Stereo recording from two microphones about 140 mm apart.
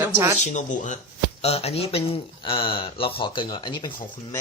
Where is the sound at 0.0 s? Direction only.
20° right (ahead or behind).